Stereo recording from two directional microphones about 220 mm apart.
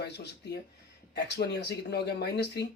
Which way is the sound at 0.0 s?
50° left (ahead or behind).